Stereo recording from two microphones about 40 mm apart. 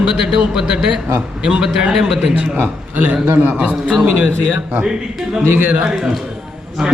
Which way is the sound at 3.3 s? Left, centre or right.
Right.